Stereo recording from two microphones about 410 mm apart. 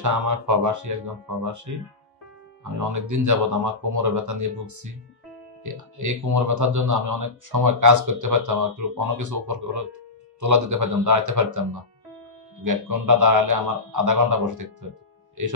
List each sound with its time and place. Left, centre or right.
0.0 s speech: right
2.7 s speech: right